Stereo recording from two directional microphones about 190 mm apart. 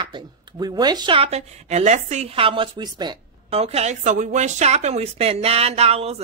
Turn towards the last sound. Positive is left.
turn(degrees=-35)  # may be behind; listen again after turning